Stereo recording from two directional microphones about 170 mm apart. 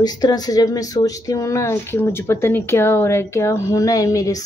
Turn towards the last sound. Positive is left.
turn(degrees=20)  # may be behind; listen again after turning